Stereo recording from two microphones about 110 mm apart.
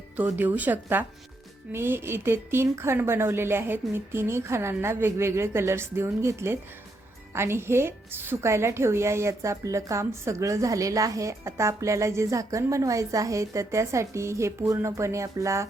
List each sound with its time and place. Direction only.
0.2 s a woman's voice: 15° right (ahead or behind)